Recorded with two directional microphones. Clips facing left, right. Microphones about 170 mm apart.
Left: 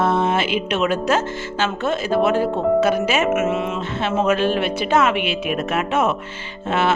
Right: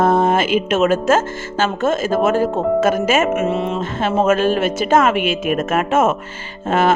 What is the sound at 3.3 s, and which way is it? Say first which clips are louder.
Speech: right 1 dB; 35° right (ahead or behind).